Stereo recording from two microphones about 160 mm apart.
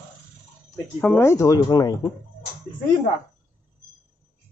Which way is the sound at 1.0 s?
15° left (ahead or behind).